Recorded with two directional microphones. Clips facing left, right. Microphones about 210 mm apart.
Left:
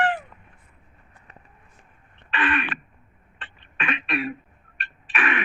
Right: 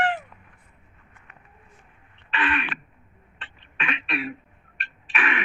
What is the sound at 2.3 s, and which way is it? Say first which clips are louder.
Throat clearing: left 2 dB; 50° left (ahead or behind).